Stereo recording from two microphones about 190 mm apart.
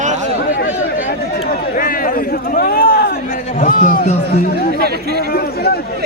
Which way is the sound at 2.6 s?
50° left (ahead or behind).